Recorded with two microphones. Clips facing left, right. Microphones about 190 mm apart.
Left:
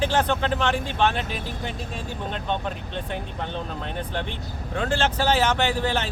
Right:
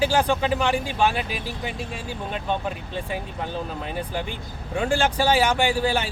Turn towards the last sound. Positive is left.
turn(degrees=-10)  # may be behind; listen again after turning